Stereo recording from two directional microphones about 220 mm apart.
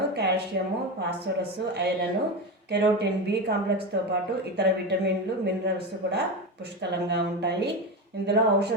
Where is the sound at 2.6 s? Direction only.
50° right (ahead or behind).